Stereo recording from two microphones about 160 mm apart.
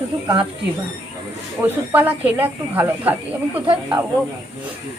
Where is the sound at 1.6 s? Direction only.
10° right (ahead or behind).